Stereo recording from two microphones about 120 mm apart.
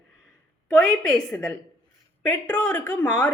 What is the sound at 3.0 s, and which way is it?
Speech, 15° left (ahead or behind).